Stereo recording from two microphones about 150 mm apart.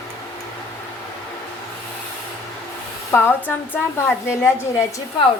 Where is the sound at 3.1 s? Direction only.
15° left (ahead or behind).